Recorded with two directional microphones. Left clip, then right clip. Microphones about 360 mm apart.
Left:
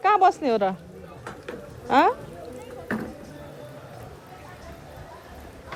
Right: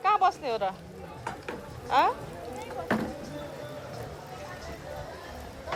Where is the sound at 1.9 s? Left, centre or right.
Left.